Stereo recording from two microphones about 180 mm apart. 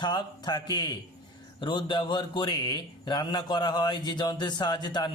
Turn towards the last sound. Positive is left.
turn(degrees=25)  # may be behind; listen again after turning